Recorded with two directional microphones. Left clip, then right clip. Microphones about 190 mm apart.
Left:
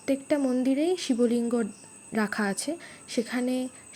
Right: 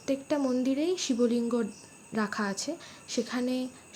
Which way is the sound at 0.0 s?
15° left (ahead or behind).